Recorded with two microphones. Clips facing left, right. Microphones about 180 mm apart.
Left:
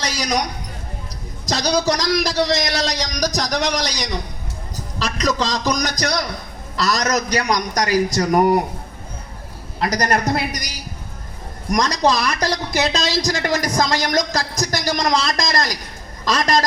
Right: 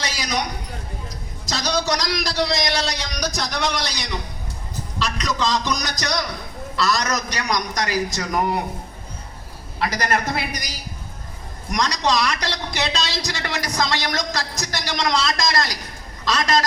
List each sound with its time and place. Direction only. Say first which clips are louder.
0.0 s a sound: left 4 dB; 45° left (ahead or behind)
1.5 s a man's voice: left 4 dB; 40° left (ahead or behind)
9.8 s a man's voice: left 3 dB; 40° left (ahead or behind)
11.7 s a man's voice: left 4 dB; 45° left (ahead or behind)